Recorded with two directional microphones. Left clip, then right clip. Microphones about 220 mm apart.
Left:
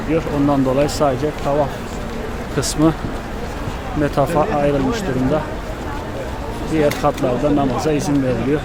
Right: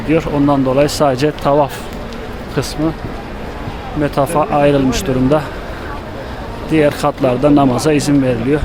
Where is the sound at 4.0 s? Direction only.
15° right (ahead or behind).